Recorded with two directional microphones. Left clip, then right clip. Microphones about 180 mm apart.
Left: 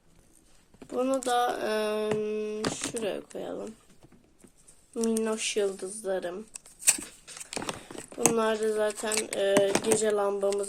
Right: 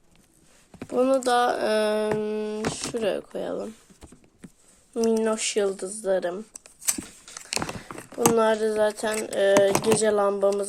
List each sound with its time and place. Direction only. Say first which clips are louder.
0.9 s speech: right 6 dB; 30° right (ahead or behind)
4.9 s speech: right 6 dB; 25° right (ahead or behind)
8.4 s speech: right 5 dB; 30° right (ahead or behind)